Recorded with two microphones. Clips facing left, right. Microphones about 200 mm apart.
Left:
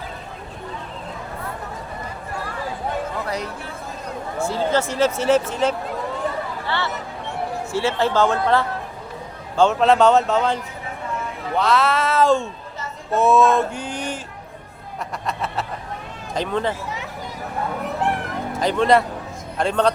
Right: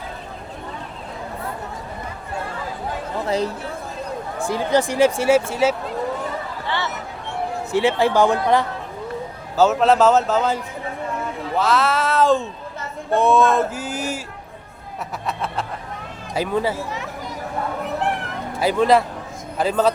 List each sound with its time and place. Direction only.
3.2 s speech: 30° right (ahead or behind)
4.4 s speech: 15° right (ahead or behind)
6.7 s a sound: 15° right (ahead or behind)
7.7 s speech: 15° right (ahead or behind)
9.6 s speech: 5° right (ahead or behind)
15.3 s speech: centre (ahead or behind)
18.6 s speech: 5° right (ahead or behind)